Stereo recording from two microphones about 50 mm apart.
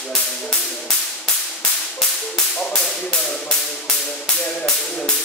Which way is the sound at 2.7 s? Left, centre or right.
Centre.